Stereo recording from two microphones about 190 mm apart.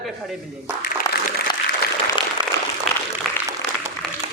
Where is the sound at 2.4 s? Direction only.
25° right (ahead or behind).